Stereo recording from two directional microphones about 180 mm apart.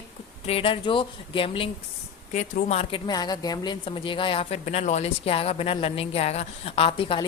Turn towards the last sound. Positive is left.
turn(degrees=30)  # may be behind; listen again after turning